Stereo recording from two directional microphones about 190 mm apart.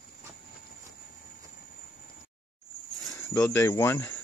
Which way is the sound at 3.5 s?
15° left (ahead or behind).